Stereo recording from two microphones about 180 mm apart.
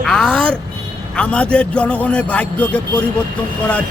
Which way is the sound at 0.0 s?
5° left (ahead or behind).